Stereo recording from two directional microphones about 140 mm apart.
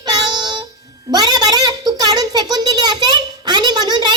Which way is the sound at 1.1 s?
30° right (ahead or behind).